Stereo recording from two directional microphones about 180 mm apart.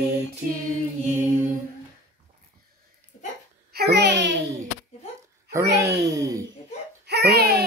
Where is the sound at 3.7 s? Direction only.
65° right (ahead or behind).